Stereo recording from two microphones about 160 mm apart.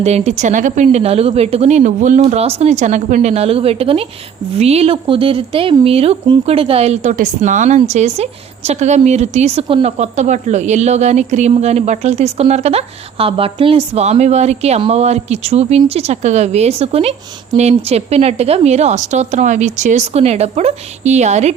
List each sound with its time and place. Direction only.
0.0 s a woman's voice: 45° right (ahead or behind)
2.2 s a woman's voice: 40° right (ahead or behind)